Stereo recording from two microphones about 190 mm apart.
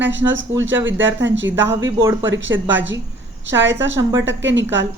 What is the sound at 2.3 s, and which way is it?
A woman's voice, 80° right.